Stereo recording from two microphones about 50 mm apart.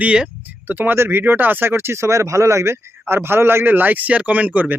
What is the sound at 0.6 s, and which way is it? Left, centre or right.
Speech, right.